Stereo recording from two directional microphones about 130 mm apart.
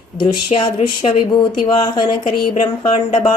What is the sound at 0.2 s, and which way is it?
Speech, 40° left (ahead or behind).